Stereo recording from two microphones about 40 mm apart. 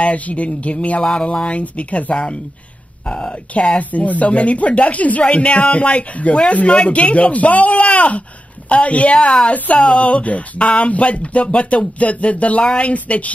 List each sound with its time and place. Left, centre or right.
0.0 s speech: left
1.0 s speech: centre
1.5 s speech: left
3.1 s speech: centre
3.5 s speech: left